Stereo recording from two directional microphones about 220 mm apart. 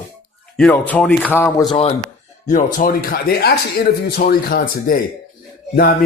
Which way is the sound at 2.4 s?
35° left (ahead or behind).